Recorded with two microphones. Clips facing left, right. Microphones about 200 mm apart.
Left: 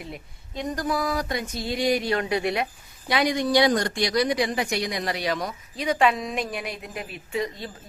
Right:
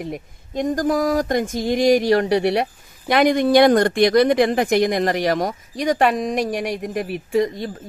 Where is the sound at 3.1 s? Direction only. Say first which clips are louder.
Right 7 dB; 55° right (ahead or behind).